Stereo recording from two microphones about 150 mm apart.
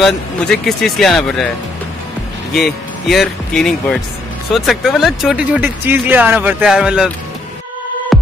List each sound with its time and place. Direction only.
0.0 s speech: centre (ahead or behind)
2.5 s speech: centre (ahead or behind)
8.1 s music: centre (ahead or behind)